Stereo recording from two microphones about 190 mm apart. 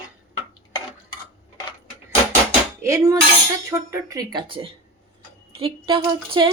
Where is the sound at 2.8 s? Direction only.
15° right (ahead or behind).